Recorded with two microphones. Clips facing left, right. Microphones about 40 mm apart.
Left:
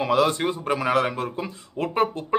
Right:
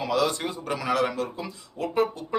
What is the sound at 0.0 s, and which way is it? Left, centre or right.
A man's voice, left.